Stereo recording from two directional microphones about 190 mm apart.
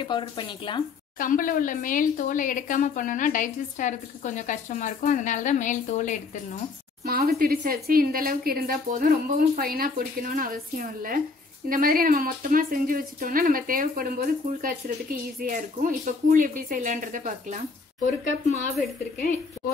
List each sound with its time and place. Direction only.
0.0 s speech: 25° left (ahead or behind)
1.1 s speech: 45° left (ahead or behind)
7.1 s speech: 50° right (ahead or behind)
18.0 s speech: 40° left (ahead or behind)